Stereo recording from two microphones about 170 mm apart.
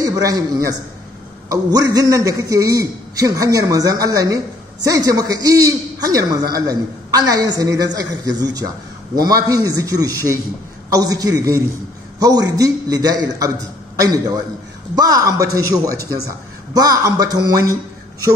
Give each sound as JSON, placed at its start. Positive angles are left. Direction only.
{"t": 0.0, "sound": "a man's voice", "side_deg": -20}